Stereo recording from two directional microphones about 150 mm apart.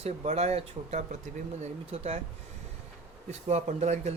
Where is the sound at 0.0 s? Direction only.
45° right (ahead or behind).